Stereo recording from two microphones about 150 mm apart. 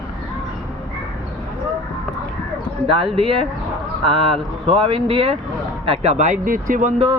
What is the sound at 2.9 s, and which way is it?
Speech, 40° right (ahead or behind).